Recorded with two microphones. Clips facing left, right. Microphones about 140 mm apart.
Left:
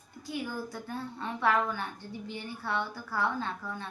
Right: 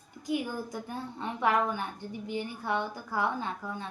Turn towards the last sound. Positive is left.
turn(degrees=-15)  # may be behind; listen again after turning